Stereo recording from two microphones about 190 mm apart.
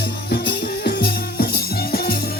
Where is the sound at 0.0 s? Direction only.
60° left (ahead or behind).